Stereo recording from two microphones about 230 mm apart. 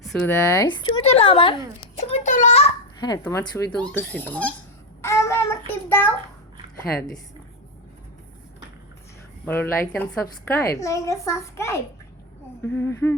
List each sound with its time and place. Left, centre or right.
0.0 s a woman's voice: centre
5.0 s child singing: centre
9.5 s a woman's voice: centre